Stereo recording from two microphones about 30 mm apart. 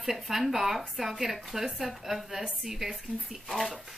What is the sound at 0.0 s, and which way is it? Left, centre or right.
Speech, centre.